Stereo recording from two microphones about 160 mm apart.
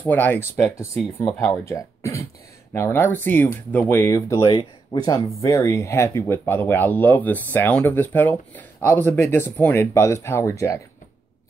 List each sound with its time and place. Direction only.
0.0 s speech: 10° left (ahead or behind)